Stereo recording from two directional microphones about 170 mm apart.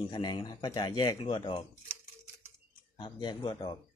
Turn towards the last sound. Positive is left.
turn(degrees=25)  # may be behind; listen again after turning